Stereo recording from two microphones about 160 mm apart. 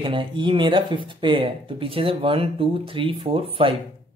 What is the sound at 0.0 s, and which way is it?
Speech, 30° right (ahead or behind).